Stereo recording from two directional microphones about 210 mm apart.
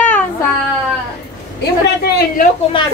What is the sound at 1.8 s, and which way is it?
Speech, 50° left (ahead or behind).